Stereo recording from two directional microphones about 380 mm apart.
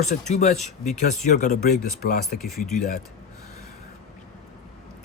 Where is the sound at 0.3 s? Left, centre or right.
Centre.